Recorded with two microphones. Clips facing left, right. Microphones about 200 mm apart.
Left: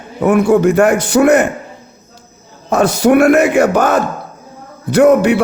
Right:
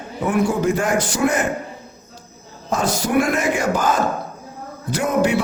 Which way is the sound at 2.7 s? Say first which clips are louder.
Left 9 dB; 70° left (ahead or behind).